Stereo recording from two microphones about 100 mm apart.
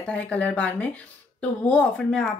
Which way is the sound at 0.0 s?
10° left (ahead or behind).